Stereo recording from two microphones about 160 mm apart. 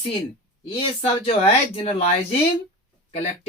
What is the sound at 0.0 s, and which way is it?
Speech, 35° left (ahead or behind).